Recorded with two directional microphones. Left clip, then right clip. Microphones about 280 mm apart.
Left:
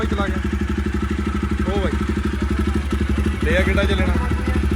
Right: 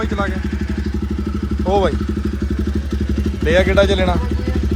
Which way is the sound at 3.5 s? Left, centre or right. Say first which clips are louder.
Right 7 dB; centre.